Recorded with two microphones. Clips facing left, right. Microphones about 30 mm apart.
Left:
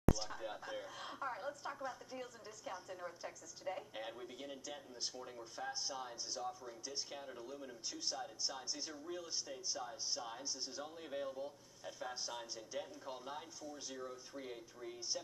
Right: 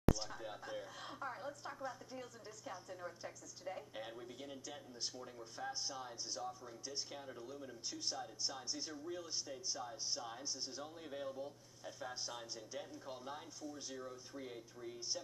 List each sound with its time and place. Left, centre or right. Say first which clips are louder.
0.2 s speech: left 2 dB; centre